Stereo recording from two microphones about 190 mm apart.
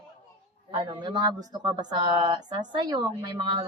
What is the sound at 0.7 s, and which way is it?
Speech, 25° right (ahead or behind).